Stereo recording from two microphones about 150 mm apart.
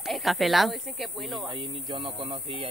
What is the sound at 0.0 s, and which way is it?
Speech, centre (ahead or behind).